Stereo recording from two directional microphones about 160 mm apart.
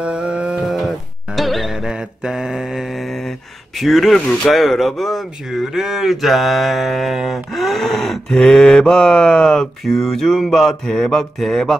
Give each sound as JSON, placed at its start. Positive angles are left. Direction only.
{"t": 0.0, "sound": "music", "side_deg": -5}